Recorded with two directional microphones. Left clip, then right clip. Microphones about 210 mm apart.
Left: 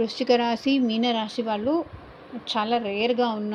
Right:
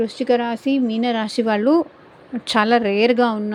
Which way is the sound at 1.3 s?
40° right (ahead or behind).